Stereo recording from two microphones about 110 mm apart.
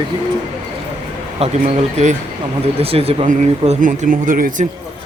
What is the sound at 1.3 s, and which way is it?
Speech, 70° right (ahead or behind).